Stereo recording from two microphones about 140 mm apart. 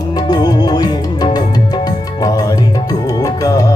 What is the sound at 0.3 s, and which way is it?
Music, 30° left (ahead or behind).